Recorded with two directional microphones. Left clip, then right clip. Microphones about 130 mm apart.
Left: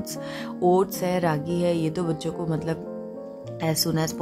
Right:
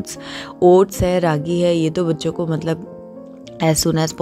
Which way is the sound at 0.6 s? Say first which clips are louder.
Right 9 dB; 30° right (ahead or behind).